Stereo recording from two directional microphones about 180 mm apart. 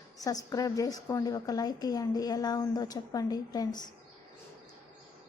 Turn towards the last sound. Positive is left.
turn(degrees=20)  # may be behind; listen again after turning